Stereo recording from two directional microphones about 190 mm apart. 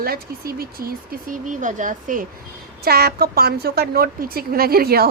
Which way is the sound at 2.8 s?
55° right (ahead or behind).